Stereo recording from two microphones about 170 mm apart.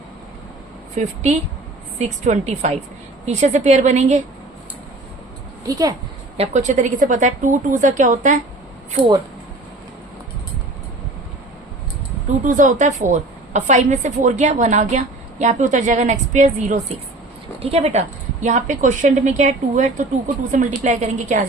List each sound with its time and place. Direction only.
0.9 s a woman's voice: 45° right (ahead or behind)
5.6 s speech: 20° right (ahead or behind)
6.3 s a woman's voice: 40° right (ahead or behind)
9.0 s speech: 30° right (ahead or behind)
12.5 s a woman's voice: 50° right (ahead or behind)